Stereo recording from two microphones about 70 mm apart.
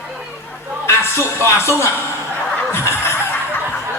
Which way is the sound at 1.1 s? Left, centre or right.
Left.